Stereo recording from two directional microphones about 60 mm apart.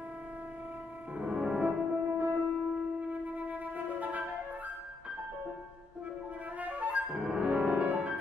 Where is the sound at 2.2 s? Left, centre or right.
Right.